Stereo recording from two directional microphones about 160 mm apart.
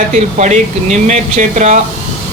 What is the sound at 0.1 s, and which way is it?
Speech, 50° right (ahead or behind).